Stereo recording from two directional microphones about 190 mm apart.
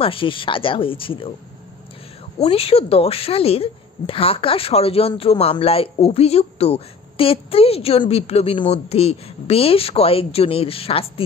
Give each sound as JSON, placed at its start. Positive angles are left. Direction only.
{"t": 0.0, "sound": "speech", "side_deg": 30}
{"t": 2.4, "sound": "a woman's voice", "side_deg": 30}